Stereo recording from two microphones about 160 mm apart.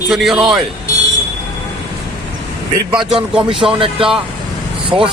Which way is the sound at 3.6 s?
35° right (ahead or behind).